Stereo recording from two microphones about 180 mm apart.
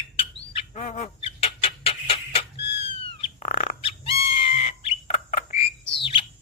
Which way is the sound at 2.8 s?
35° left (ahead or behind).